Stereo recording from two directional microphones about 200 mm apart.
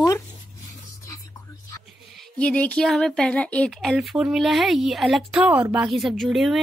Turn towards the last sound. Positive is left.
turn(degrees=0)  # may be behind; listen again after turning